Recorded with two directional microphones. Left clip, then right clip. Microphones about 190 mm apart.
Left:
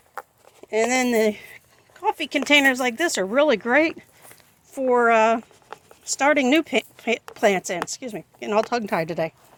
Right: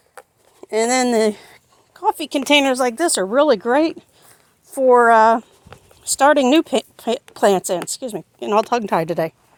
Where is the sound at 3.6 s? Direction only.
40° right (ahead or behind).